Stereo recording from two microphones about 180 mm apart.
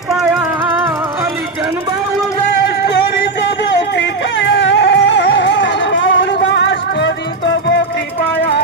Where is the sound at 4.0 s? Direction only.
90° left.